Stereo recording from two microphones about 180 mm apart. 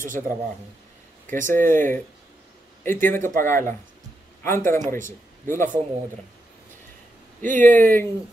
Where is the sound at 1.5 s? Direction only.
10° left (ahead or behind).